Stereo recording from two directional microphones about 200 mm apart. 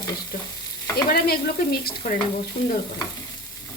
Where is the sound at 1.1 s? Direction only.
50° left (ahead or behind).